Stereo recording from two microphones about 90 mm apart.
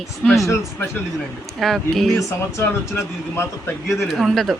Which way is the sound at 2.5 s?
30° left (ahead or behind).